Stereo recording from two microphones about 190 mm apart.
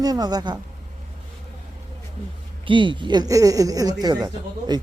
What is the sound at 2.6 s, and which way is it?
Speech, 25° right (ahead or behind).